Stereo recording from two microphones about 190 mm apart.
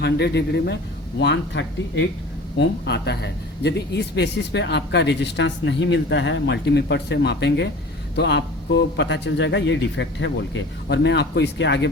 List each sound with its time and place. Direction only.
0.0 s a man's voice: 65° left (ahead or behind)